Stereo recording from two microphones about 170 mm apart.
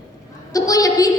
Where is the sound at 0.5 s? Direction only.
20° left (ahead or behind).